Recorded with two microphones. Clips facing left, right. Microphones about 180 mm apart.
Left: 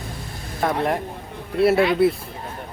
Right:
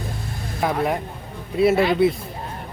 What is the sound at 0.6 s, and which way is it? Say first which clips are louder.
Speech: even; centre (ahead or behind).